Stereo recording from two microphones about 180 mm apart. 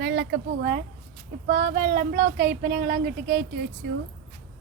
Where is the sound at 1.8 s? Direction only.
60° right (ahead or behind).